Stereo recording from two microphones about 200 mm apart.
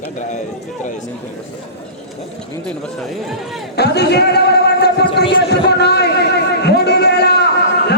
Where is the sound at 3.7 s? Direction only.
55° left (ahead or behind).